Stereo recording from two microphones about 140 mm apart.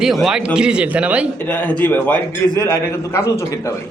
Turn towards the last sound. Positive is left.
turn(degrees=20)  # may be behind; listen again after turning